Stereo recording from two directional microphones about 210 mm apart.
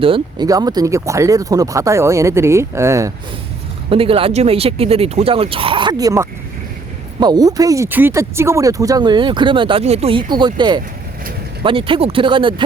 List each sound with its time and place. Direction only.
0.0 s speech: 20° right (ahead or behind)
3.8 s speech: 25° right (ahead or behind)